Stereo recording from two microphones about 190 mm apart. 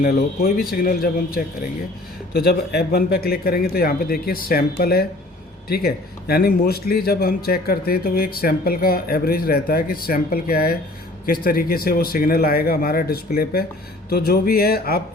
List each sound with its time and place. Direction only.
0.0 s speech: 55° left (ahead or behind)